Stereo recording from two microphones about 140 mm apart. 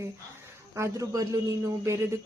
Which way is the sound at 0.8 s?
25° right (ahead or behind).